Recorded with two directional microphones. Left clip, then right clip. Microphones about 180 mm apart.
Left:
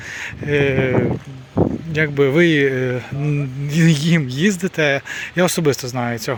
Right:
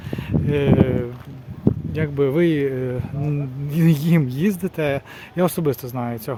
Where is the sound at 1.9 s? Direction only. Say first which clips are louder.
Left 6 dB; 15° left (ahead or behind).